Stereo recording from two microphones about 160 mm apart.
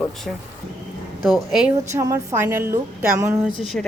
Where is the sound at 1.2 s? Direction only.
Centre (ahead or behind).